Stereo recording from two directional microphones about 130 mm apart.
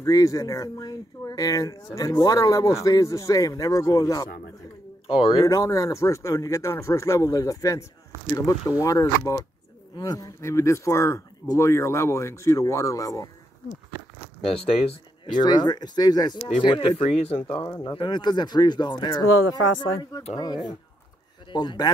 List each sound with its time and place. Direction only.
0.0 s speech: 25° left (ahead or behind)
5.1 s speech: 45° left (ahead or behind)
5.4 s speech: 25° left (ahead or behind)
14.4 s speech: 45° left (ahead or behind)
15.4 s speech: 30° left (ahead or behind)
17.0 s speech: 55° left (ahead or behind)
17.6 s speech: 35° left (ahead or behind)